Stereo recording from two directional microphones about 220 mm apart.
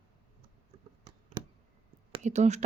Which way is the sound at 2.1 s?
30° right (ahead or behind).